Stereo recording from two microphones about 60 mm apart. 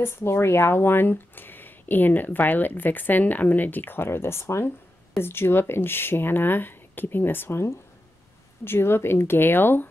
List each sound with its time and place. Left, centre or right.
0.0 s speech: left
8.6 s speech: left